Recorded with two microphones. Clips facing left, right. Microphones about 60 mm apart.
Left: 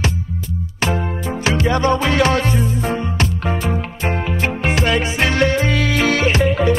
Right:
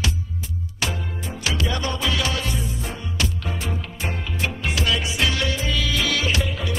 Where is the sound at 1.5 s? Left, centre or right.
Left.